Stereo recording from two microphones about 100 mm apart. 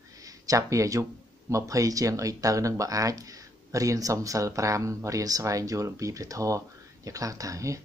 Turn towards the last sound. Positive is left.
turn(degrees=-35)  # may be behind; listen again after turning